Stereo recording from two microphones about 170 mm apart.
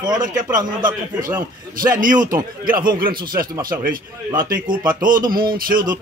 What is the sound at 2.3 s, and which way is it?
Speech, 55° right (ahead or behind).